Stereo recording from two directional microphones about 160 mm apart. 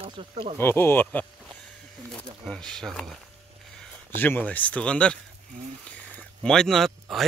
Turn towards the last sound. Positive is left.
turn(degrees=0)  # may be behind; listen again after turning